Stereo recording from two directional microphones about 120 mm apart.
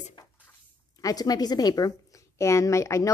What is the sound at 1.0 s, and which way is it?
A woman's voice, 30° left (ahead or behind).